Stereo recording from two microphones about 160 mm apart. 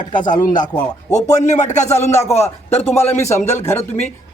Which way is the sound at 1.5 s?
50° left (ahead or behind).